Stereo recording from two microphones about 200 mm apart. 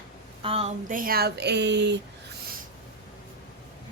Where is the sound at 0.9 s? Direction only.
45° right (ahead or behind).